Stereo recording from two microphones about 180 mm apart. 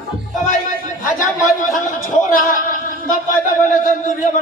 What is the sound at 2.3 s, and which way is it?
Female singing, 50° left (ahead or behind).